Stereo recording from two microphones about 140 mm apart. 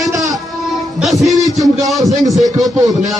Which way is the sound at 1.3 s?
25° right (ahead or behind).